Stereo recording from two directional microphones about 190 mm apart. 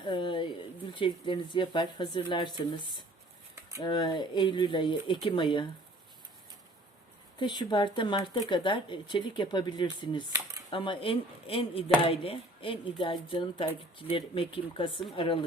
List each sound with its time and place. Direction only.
0.0 s a sound: 25° left (ahead or behind)
0.9 s speech: 25° left (ahead or behind)
7.3 s speech: 25° left (ahead or behind)